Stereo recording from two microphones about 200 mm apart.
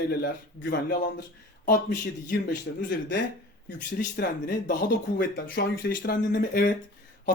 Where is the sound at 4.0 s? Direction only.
45° left (ahead or behind).